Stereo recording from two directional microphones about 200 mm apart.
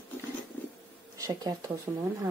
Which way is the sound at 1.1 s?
15° right (ahead or behind).